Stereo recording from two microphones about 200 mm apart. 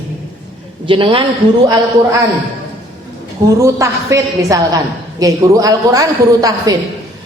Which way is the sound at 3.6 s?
15° right (ahead or behind).